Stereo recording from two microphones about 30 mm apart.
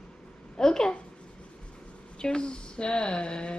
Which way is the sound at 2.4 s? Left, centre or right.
Left.